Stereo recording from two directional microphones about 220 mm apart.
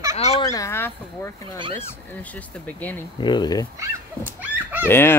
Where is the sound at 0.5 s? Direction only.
15° left (ahead or behind).